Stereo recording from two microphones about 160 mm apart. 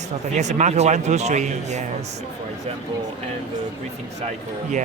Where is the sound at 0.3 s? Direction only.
45° right (ahead or behind).